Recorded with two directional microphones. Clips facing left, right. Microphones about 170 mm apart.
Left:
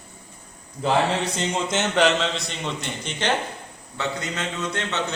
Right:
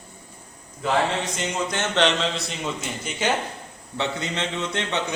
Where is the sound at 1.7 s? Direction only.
15° left (ahead or behind).